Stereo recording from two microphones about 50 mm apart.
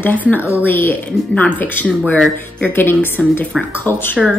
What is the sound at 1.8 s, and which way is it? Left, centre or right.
Speech, left.